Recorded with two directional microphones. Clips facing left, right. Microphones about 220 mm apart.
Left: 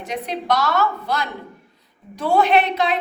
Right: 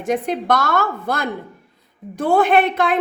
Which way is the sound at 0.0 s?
50° right (ahead or behind).